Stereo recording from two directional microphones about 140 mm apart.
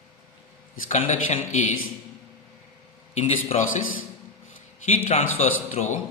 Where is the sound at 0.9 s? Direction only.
55° left (ahead or behind).